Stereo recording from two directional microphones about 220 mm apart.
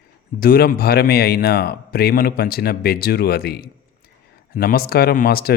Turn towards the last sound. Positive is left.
turn(degrees=45)  # may be behind; listen again after turning